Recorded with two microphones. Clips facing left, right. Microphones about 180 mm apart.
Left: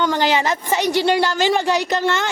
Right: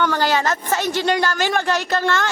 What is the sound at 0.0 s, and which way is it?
A woman's voice, 15° left (ahead or behind).